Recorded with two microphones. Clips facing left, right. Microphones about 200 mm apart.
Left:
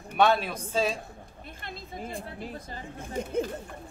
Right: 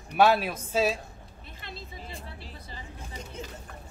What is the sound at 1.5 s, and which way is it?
Speech, 50° left (ahead or behind).